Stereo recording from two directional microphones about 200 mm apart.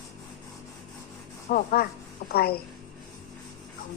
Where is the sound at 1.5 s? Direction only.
45° left (ahead or behind).